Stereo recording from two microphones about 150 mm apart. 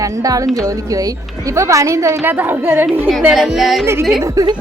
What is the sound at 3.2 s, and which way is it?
Speech, 5° right (ahead or behind).